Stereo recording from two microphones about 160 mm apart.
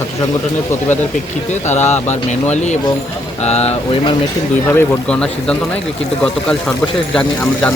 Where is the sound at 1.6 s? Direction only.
45° left (ahead or behind).